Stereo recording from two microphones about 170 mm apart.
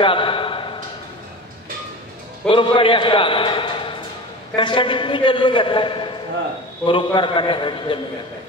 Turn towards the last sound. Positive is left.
turn(degrees=30)  # may be behind; listen again after turning